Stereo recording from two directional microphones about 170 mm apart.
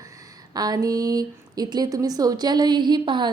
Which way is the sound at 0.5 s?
20° right (ahead or behind).